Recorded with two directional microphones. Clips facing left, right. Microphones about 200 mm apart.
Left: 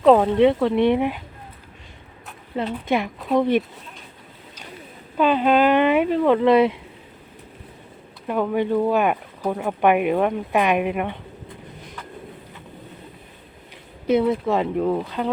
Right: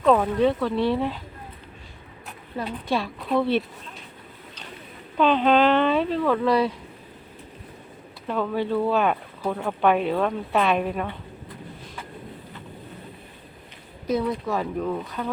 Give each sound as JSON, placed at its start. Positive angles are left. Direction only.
{"t": 0.0, "sound": "speech", "side_deg": 30}
{"t": 2.6, "sound": "speech", "side_deg": 20}
{"t": 5.1, "sound": "speech", "side_deg": 10}
{"t": 8.3, "sound": "speech", "side_deg": 15}
{"t": 14.1, "sound": "speech", "side_deg": 25}